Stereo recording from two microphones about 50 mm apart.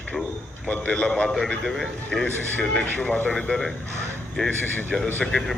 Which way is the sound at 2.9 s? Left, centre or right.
Left.